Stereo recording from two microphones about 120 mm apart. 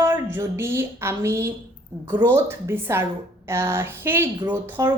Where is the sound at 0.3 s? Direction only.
20° right (ahead or behind).